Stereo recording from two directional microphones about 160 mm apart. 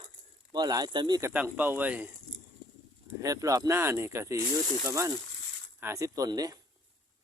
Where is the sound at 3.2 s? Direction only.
20° right (ahead or behind).